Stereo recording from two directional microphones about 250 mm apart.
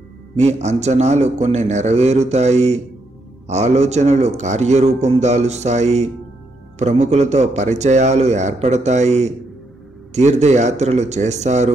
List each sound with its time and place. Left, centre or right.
0.4 s a man's voice: right